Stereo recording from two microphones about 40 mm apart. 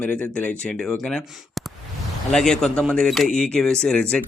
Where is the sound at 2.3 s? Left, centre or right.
Centre.